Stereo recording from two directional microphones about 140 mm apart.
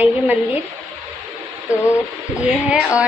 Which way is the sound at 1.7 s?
20° left (ahead or behind).